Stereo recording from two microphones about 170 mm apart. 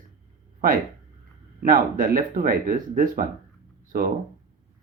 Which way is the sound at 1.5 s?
60° right (ahead or behind).